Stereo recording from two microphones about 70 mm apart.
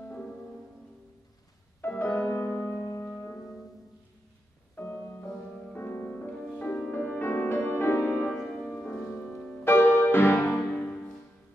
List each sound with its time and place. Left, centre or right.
0.0 s music: left
1.8 s music: left
4.7 s music: left
9.7 s music: left
10.7 s music: left